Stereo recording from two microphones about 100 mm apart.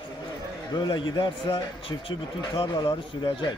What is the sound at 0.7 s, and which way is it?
Speech, 50° left (ahead or behind).